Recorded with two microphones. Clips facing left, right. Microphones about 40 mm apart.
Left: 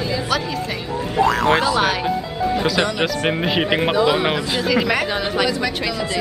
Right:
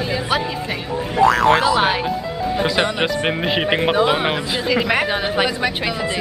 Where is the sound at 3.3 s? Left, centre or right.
Centre.